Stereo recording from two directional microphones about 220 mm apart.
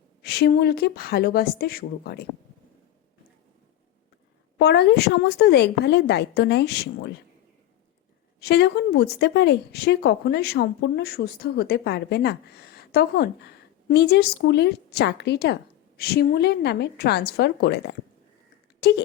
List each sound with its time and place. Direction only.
0.2 s speech: 45° left (ahead or behind)
4.5 s speech: 50° left (ahead or behind)
8.4 s speech: 50° left (ahead or behind)